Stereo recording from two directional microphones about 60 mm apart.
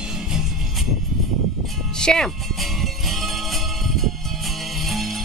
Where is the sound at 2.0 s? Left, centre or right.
Centre.